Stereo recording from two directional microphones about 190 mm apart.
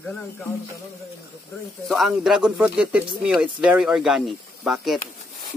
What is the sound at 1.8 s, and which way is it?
Speech, centre (ahead or behind).